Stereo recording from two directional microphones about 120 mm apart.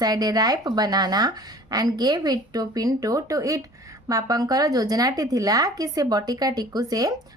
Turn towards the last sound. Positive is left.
turn(degrees=-30)  # may be behind; listen again after turning